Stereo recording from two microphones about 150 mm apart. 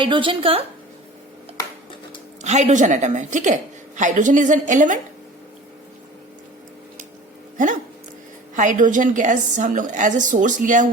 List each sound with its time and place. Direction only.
0.0 s a woman's voice: 35° right (ahead or behind)
2.4 s a woman's voice: 50° right (ahead or behind)
7.5 s a woman's voice: 60° right (ahead or behind)